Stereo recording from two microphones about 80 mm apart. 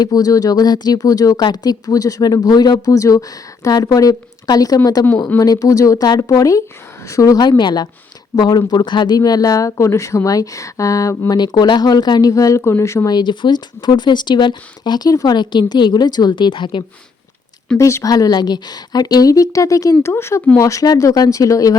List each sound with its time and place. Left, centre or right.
0.0 s speech: left
1.4 s speech: left
1.9 s speech: left
7.3 s speech: left
9.1 s speech: left
11.3 s speech: left
12.3 s speech: left
13.1 s speech: left
15.1 s speech: left
17.7 s speech: left
18.1 s speech: left